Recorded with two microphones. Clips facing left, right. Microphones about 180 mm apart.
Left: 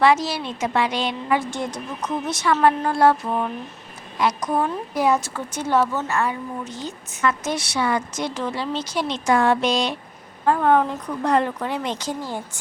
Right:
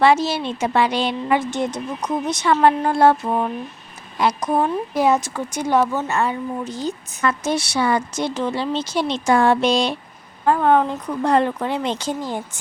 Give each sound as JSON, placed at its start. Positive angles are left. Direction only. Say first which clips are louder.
{"t": 0.0, "sound": "a woman's voice", "louder": "right 2 dB", "side_deg": -30}
{"t": 1.4, "sound": "a woman's voice", "louder": "right 4 dB", "side_deg": -20}
{"t": 6.1, "sound": "a woman's voice", "louder": "right 3 dB", "side_deg": -30}